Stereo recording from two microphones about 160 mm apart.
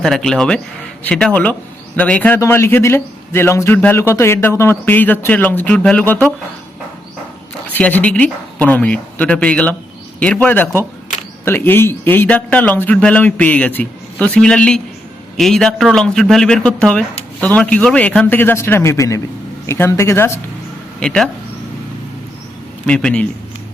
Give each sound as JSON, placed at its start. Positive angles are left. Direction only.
{"t": 0.0, "sound": "a man's voice", "side_deg": 0}
{"t": 7.7, "sound": "a man's voice", "side_deg": 10}
{"t": 21.0, "sound": "a man's voice", "side_deg": 5}
{"t": 22.9, "sound": "a man's voice", "side_deg": 5}